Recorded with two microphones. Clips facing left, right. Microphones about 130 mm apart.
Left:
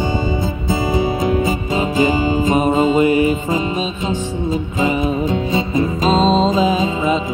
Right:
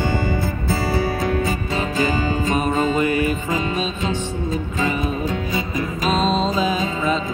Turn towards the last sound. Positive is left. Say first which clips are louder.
# left 4 dB
turn(degrees=20)  # may be behind; listen again after turning